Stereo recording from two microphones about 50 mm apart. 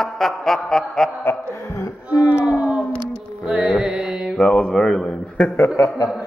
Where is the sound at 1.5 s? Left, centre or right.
Left.